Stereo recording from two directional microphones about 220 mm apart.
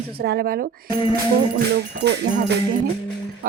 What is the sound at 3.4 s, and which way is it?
Speech, 40° right (ahead or behind).